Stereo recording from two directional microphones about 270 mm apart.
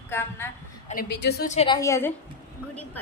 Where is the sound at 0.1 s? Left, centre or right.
Centre.